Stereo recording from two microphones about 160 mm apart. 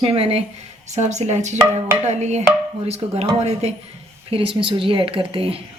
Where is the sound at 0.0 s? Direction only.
35° right (ahead or behind).